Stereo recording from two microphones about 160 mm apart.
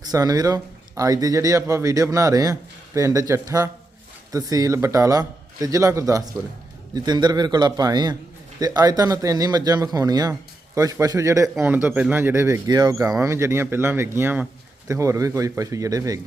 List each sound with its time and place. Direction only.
0.1 s speech: 25° right (ahead or behind)